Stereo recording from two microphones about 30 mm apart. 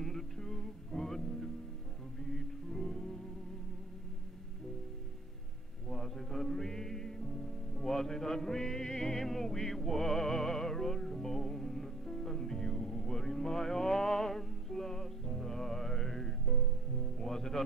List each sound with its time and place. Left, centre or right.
0.0 s music: centre
5.9 s music: centre